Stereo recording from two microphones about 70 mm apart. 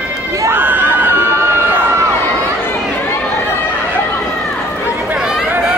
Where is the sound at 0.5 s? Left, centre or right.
Right.